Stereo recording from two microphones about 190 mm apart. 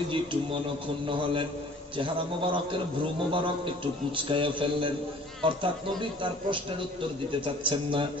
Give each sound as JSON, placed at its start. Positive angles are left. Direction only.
{"t": 0.1, "sound": "a man's voice", "side_deg": -25}